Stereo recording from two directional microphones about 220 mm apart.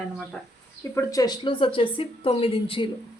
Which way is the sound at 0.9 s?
15° left (ahead or behind).